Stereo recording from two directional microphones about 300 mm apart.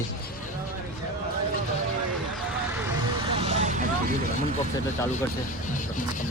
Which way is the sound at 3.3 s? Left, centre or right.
Right.